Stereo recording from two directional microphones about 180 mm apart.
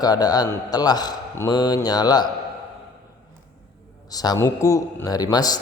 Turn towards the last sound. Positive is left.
turn(degrees=20)  # may be behind; listen again after turning